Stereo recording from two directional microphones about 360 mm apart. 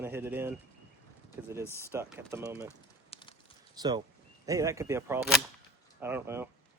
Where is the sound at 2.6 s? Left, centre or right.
Centre.